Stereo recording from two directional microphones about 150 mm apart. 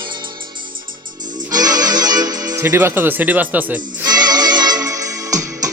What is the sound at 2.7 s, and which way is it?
Speech, 15° right (ahead or behind).